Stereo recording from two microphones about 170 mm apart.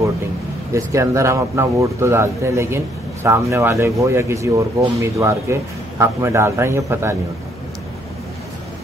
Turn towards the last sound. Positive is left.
turn(degrees=-15)  # may be behind; listen again after turning